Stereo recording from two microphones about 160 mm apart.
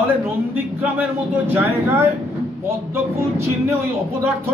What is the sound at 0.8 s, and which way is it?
Speech, 10° right (ahead or behind).